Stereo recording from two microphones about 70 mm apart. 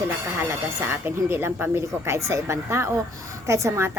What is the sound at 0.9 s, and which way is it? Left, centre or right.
Speech, right.